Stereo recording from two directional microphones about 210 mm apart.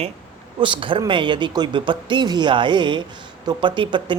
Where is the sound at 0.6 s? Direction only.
25° right (ahead or behind).